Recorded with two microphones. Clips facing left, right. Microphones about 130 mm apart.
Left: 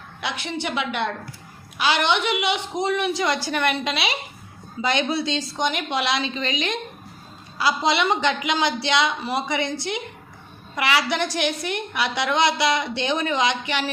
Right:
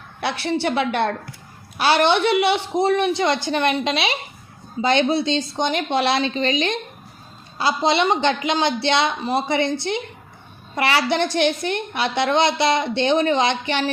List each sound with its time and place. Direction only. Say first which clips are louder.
0.2 s a woman's voice: right 6 dB; 35° right (ahead or behind)